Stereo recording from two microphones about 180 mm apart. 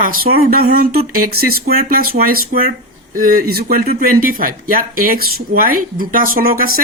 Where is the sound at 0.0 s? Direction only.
50° right (ahead or behind).